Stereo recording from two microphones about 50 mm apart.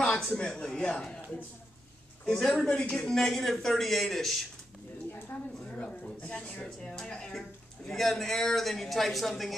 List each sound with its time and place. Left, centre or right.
0.0 s a sound: centre
0.4 s a man's voice: centre
2.2 s a man's voice: centre
2.7 s a man's voice: left
3.1 s speech: centre
5.3 s speech: left
5.7 s a sound: centre
6.2 s speech: left
6.6 s a man's voice: centre